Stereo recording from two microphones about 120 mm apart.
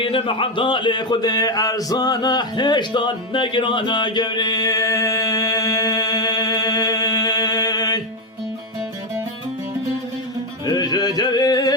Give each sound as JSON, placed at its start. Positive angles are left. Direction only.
{"t": 0.0, "sound": "speech", "side_deg": 45}
{"t": 10.7, "sound": "music", "side_deg": 35}